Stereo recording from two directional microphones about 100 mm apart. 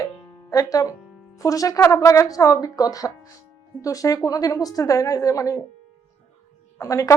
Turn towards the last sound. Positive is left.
turn(degrees=35)  # may be behind; listen again after turning